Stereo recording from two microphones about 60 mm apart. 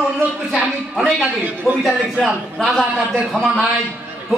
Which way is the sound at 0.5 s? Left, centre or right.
Centre.